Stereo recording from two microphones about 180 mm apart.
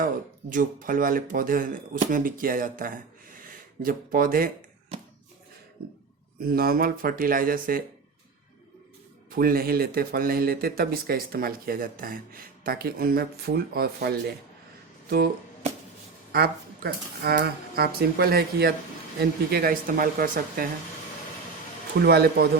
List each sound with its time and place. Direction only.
0.5 s speech: 50° right (ahead or behind)
6.4 s speech: 55° right (ahead or behind)
9.3 s speech: 55° right (ahead or behind)
16.3 s speech: 60° right (ahead or behind)
22.0 s speech: 60° right (ahead or behind)